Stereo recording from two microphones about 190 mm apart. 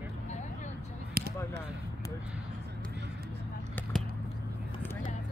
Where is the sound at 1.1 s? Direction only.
60° right (ahead or behind).